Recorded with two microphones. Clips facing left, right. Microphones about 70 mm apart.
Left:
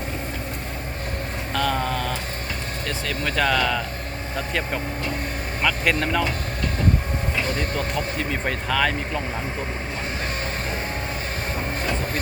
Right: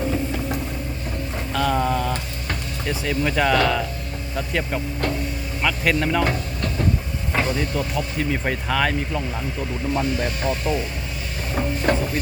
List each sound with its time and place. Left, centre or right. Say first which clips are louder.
1.5 s a sound: right 3 dB; centre
2.8 s speech: right 5 dB; centre
8.4 s speech: left 1 dB; centre
10.0 s speech: right 4 dB; left
11.9 s speech: right 9 dB; right